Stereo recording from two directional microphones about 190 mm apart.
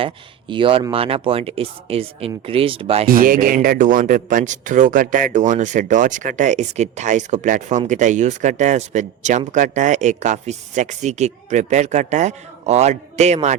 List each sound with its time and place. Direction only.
0.0 s speech: 25° right (ahead or behind)
3.1 s speech: 45° right (ahead or behind)